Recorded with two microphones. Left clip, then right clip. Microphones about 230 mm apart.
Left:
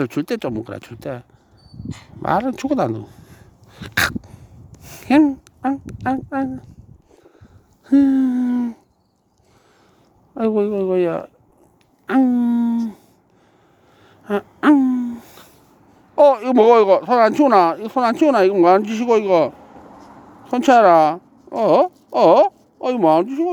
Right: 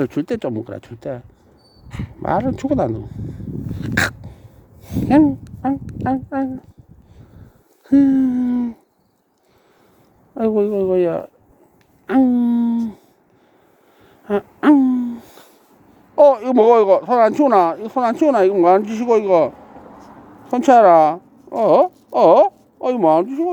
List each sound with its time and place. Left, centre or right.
0.0 s a woman's voice: centre
3.8 s dog: centre
4.8 s a woman's voice: centre
7.9 s speech: centre
10.3 s a woman's voice: centre
14.0 s a sound: centre
16.1 s speech: centre
19.5 s vehicle: left
20.5 s speech: centre